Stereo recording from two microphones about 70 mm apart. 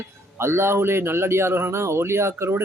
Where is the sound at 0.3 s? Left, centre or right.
Right.